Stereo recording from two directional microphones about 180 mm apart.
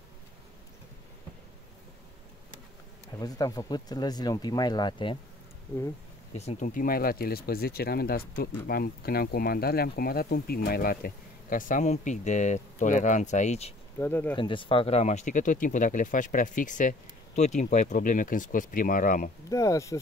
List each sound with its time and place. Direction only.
3.2 s speech: 20° left (ahead or behind)
6.3 s speech: 40° left (ahead or behind)
13.9 s speech: 10° left (ahead or behind)
14.3 s speech: 25° left (ahead or behind); by 19.3 s 50° left (ahead or behind)
19.5 s speech: 20° left (ahead or behind)